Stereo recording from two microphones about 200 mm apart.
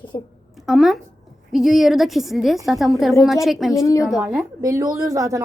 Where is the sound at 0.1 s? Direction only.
20° left (ahead or behind).